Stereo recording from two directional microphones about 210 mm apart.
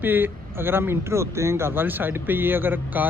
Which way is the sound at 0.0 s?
10° right (ahead or behind).